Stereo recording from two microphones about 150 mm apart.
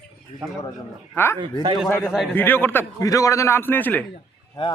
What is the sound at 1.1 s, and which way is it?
A man's voice, 15° left (ahead or behind).